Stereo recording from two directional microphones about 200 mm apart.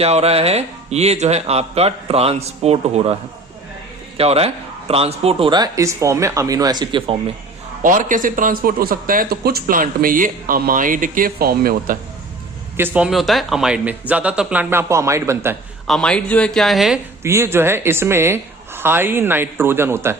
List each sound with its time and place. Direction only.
0.0 s speech: 30° right (ahead or behind)
4.2 s a man's voice: 30° right (ahead or behind)
7.8 s a man's voice: 40° right (ahead or behind)
12.7 s speech: 10° right (ahead or behind)
15.9 s speech: 5° left (ahead or behind)
17.2 s speech: 15° right (ahead or behind)